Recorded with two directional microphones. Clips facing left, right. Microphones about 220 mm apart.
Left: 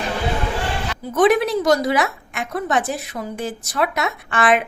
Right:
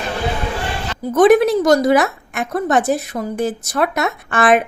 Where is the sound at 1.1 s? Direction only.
45° right (ahead or behind).